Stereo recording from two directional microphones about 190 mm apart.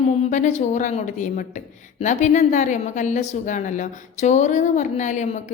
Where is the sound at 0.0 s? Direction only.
35° left (ahead or behind).